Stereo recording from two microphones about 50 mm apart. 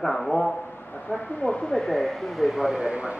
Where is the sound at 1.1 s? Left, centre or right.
Left.